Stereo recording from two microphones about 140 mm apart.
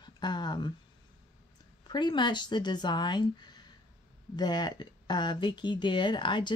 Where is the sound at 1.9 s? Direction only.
30° left (ahead or behind).